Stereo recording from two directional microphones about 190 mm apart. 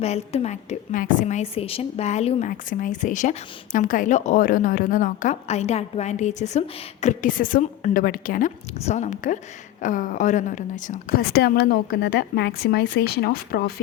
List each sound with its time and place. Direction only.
0.0 s a woman's voice: 35° left (ahead or behind); by 13.7 s 55° left (ahead or behind)